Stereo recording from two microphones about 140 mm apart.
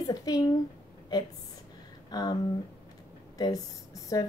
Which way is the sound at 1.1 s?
30° left (ahead or behind).